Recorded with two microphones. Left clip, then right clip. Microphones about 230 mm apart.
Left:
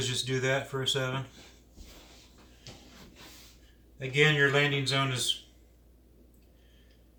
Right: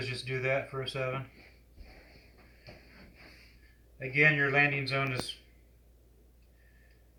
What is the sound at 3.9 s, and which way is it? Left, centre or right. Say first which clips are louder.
Speech: left 1 dB; centre.